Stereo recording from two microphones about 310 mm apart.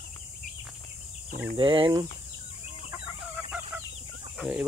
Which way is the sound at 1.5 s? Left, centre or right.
Centre.